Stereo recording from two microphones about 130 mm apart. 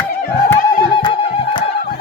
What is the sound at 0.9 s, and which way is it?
Music, 40° left (ahead or behind).